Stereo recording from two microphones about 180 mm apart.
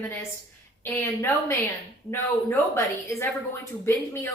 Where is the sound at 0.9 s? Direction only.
15° left (ahead or behind).